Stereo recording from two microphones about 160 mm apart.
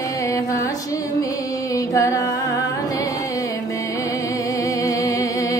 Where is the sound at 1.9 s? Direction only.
20° left (ahead or behind).